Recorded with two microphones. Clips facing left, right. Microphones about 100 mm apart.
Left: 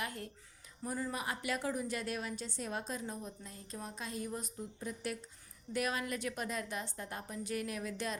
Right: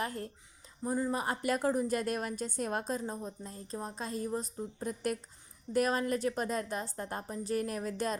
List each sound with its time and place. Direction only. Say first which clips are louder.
0.0 s a woman's voice: right 5 dB; 35° right (ahead or behind)
0.9 s speech: right 6 dB; 25° right (ahead or behind)
1.1 s a woman's voice: right 6 dB; 40° right (ahead or behind)